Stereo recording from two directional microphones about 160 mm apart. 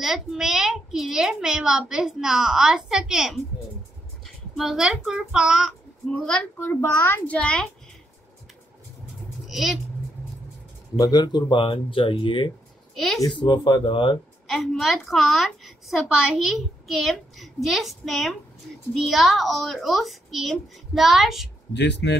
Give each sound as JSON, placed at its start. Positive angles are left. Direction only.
{"t": 0.0, "sound": "a child's voice", "side_deg": 0}
{"t": 4.6, "sound": "a child's voice", "side_deg": 0}
{"t": 6.8, "sound": "a child's voice", "side_deg": 15}
{"t": 9.5, "sound": "speech", "side_deg": 0}
{"t": 11.0, "sound": "speech", "side_deg": 25}
{"t": 12.9, "sound": "speech", "side_deg": 0}
{"t": 13.2, "sound": "speech", "side_deg": 30}
{"t": 14.5, "sound": "a child's voice", "side_deg": 0}
{"t": 21.7, "sound": "speech", "side_deg": 90}